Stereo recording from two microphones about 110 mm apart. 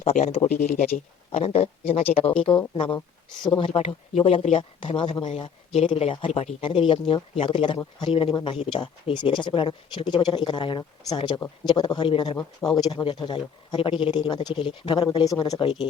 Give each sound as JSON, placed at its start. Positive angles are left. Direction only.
{"t": 0.0, "sound": "speech", "side_deg": 80}
{"t": 1.3, "sound": "speech", "side_deg": 70}
{"t": 2.7, "sound": "speech", "side_deg": 50}
{"t": 5.3, "sound": "speech", "side_deg": 65}
{"t": 6.6, "sound": "speech", "side_deg": 50}
{"t": 15.3, "sound": "speech", "side_deg": 35}